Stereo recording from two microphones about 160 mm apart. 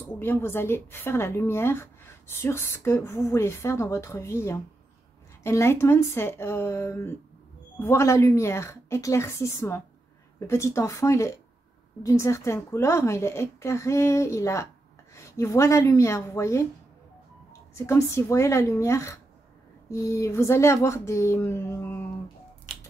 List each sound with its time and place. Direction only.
0.0 s a woman's voice: 15° left (ahead or behind)
22.7 s finger snapping: 40° right (ahead or behind)